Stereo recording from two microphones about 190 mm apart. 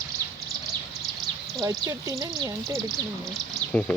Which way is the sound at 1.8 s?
20° right (ahead or behind).